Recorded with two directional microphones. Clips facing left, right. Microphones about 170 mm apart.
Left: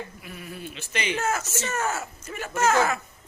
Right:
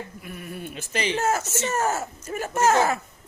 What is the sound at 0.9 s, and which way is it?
A woman's voice, 35° right (ahead or behind).